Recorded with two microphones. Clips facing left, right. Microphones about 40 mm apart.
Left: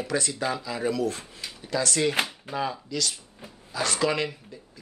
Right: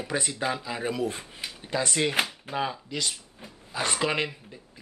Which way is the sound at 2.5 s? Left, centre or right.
Centre.